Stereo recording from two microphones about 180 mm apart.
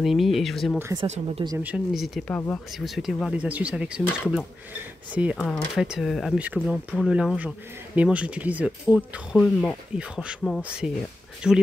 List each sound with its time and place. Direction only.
0.0 s speech: centre (ahead or behind)
1.0 s speech: 40° right (ahead or behind)
1.6 s speech: 5° right (ahead or behind)